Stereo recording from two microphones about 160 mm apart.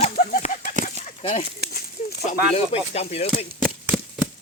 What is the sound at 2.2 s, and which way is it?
Speech, 45° left (ahead or behind).